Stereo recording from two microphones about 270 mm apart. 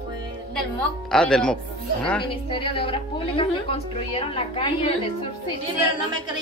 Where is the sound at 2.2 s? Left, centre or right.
Centre.